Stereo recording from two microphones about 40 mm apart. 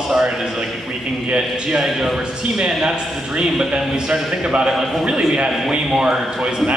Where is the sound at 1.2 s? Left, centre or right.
Right.